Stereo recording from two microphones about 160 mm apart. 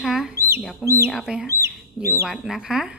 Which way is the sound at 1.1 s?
5° right (ahead or behind).